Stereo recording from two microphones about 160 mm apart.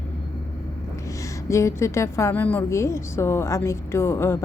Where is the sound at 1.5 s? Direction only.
20° left (ahead or behind).